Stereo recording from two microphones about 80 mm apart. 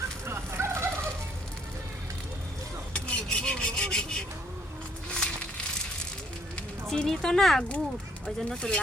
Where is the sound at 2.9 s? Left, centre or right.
Centre.